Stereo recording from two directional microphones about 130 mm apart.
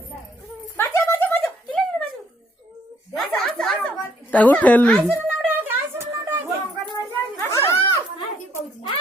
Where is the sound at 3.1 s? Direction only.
Centre (ahead or behind).